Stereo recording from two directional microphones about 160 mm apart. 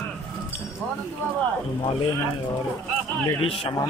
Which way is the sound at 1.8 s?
30° left (ahead or behind).